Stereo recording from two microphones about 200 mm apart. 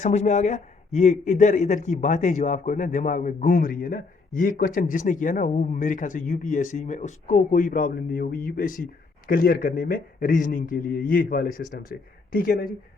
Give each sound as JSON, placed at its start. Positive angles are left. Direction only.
{"t": 0.0, "sound": "speech", "side_deg": 35}